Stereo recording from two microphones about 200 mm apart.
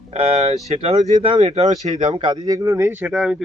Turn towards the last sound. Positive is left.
turn(degrees=0)  # may be behind; listen again after turning